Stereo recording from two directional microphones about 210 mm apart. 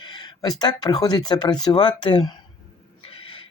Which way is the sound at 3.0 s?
25° left (ahead or behind).